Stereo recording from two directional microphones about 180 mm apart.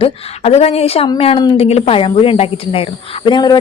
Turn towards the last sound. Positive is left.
turn(degrees=25)  # may be behind; listen again after turning